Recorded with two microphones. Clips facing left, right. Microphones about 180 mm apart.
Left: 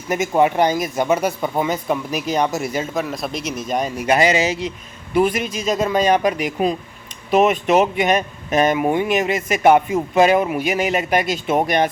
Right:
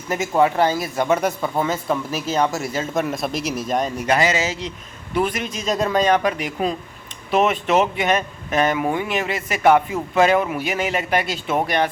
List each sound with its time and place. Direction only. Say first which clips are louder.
0.1 s speech: left 1 dB; 20° left (ahead or behind)
2.9 s speech: right 1 dB; centre (ahead or behind); by 11.9 s 15° left (ahead or behind)